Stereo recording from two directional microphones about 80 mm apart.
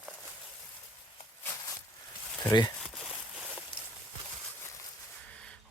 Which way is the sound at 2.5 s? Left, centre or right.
Left.